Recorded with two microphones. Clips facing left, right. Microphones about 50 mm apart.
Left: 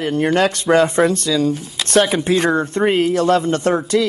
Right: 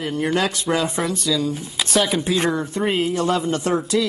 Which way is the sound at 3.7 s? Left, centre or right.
Left.